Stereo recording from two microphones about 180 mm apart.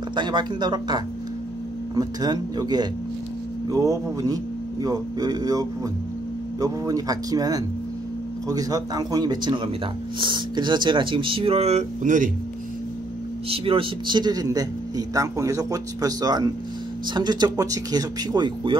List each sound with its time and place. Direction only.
0.1 s a man's voice: 25° right (ahead or behind); by 12.3 s 45° right (ahead or behind)
13.5 s a man's voice: 30° right (ahead or behind)